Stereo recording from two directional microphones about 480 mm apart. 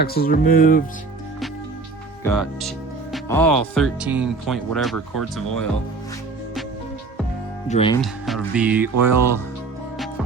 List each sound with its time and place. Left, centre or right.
0.0 s speech: centre
2.2 s speech: centre
7.7 s speech: centre